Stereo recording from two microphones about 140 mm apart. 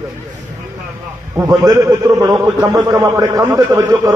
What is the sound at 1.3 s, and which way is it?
A man's voice, 25° right (ahead or behind).